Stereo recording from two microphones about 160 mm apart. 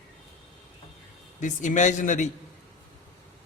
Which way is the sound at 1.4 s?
50° left (ahead or behind).